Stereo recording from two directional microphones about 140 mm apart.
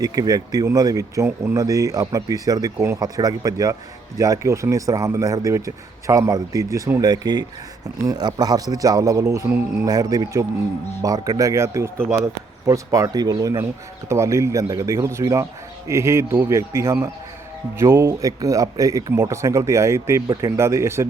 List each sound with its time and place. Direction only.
0.0 s speech: 25° right (ahead or behind)